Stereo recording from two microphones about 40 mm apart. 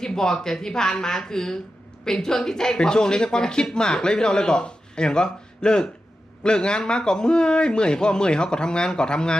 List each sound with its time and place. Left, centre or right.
0.0 s a woman's voice: centre